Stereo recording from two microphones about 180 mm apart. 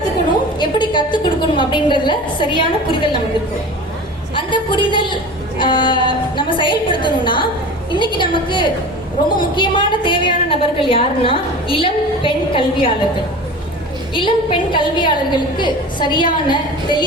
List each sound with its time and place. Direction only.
0.6 s a woman's voice: 25° left (ahead or behind)
4.4 s a woman's voice: 25° left (ahead or behind)
14.1 s a woman's voice: 25° left (ahead or behind)